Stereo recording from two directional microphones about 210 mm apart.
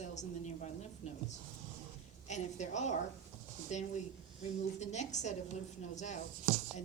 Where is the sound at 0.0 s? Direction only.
35° left (ahead or behind).